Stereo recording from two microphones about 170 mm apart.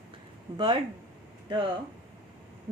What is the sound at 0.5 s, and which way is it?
Speech, 30° right (ahead or behind).